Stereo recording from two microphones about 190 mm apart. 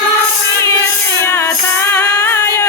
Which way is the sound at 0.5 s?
15° left (ahead or behind).